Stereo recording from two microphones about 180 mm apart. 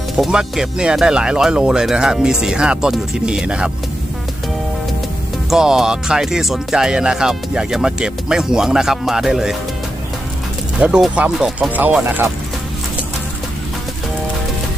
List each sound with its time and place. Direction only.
0.2 s speech: 5° right (ahead or behind)
5.5 s speech: centre (ahead or behind)
10.8 s speech: 5° right (ahead or behind)